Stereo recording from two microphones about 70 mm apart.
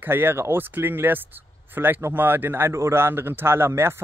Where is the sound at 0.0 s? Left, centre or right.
Right.